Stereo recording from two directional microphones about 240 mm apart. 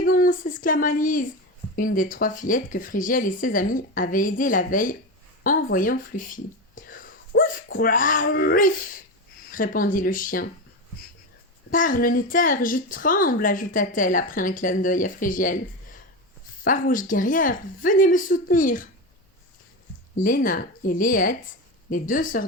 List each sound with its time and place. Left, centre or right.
0.0 s a sound: left
1.7 s a woman's voice: left
11.7 s a woman's voice: left
16.6 s a woman's voice: left
20.1 s a woman's voice: left